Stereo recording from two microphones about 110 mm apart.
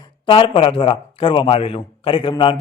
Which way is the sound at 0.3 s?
50° left (ahead or behind).